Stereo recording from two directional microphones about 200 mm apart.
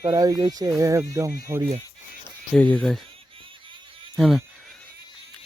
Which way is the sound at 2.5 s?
5° left (ahead or behind).